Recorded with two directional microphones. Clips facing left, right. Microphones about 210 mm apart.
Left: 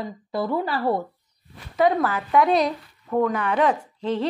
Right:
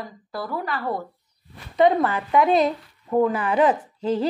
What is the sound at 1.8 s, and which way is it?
Speech, centre (ahead or behind).